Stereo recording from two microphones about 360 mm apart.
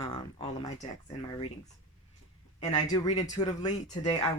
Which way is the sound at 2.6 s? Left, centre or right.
Centre.